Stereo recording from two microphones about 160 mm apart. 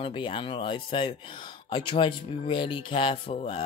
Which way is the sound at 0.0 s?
30° left (ahead or behind).